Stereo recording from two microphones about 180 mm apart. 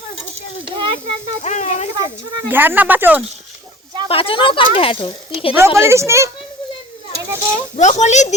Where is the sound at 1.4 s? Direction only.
40° left (ahead or behind).